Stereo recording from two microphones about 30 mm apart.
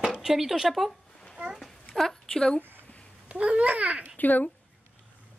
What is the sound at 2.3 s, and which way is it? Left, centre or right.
Speech, left.